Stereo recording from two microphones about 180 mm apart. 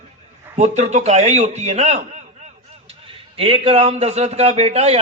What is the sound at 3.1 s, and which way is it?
A man's voice, 30° right (ahead or behind).